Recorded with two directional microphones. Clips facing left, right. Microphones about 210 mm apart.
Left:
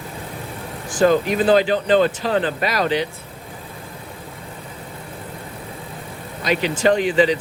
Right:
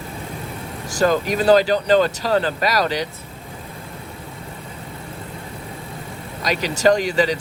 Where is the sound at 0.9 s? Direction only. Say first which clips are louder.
Left 2 dB; 40° right (ahead or behind).